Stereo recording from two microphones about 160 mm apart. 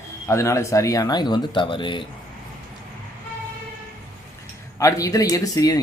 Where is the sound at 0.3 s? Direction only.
20° left (ahead or behind).